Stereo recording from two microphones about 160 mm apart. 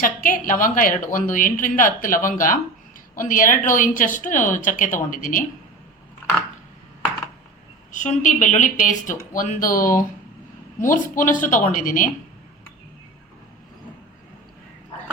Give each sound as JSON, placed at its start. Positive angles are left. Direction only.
{"t": 0.0, "sound": "a woman's voice", "side_deg": 60}
{"t": 7.9, "sound": "a woman's voice", "side_deg": 50}